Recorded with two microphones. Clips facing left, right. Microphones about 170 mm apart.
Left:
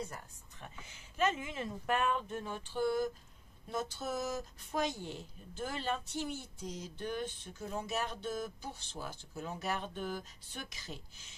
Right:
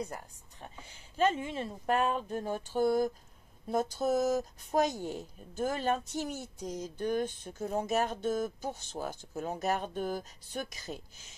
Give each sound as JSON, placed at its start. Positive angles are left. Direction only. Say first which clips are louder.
{"t": 0.6, "sound": "speech", "louder": "right 3 dB", "side_deg": -35}